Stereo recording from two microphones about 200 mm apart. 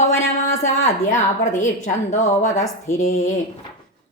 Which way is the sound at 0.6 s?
35° left (ahead or behind).